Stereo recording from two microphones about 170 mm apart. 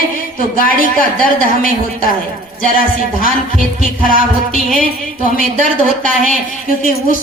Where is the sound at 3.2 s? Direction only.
55° left (ahead or behind).